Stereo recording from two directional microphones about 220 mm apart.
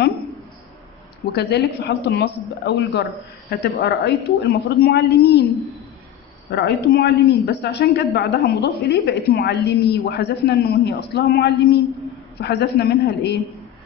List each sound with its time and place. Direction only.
1.3 s a woman's voice: 50° left (ahead or behind)
6.5 s a woman's voice: 50° left (ahead or behind)